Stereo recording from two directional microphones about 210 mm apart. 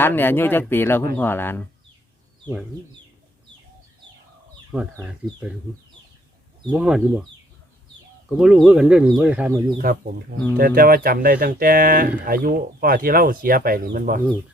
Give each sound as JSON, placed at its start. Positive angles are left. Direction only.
{"t": 0.0, "sound": "speech", "side_deg": 10}
{"t": 4.7, "sound": "speech", "side_deg": -5}
{"t": 6.7, "sound": "speech", "side_deg": -5}
{"t": 8.3, "sound": "speech", "side_deg": -5}
{"t": 9.7, "sound": "speech", "side_deg": -45}